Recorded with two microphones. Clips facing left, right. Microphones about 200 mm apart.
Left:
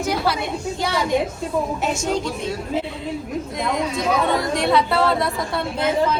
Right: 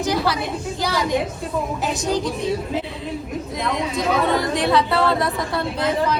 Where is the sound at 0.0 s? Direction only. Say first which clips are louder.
Right 1 dB; centre (ahead or behind).